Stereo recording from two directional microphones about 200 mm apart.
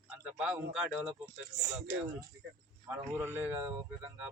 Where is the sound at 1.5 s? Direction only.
35° right (ahead or behind).